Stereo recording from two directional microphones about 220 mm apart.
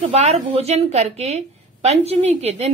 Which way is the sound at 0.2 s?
30° right (ahead or behind).